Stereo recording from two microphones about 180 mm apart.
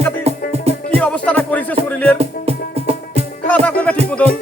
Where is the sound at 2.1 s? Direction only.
35° right (ahead or behind).